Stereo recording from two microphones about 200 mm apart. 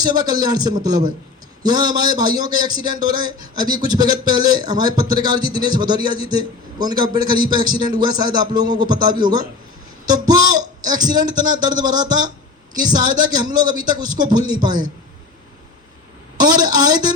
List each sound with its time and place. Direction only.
0.0 s a man's voice: 20° right (ahead or behind)
16.4 s a man's voice: 20° right (ahead or behind)